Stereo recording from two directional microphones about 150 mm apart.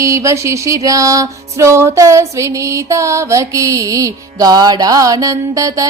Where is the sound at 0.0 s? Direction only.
20° right (ahead or behind).